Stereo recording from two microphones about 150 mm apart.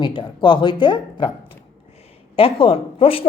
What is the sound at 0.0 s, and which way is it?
Speech, 30° left (ahead or behind).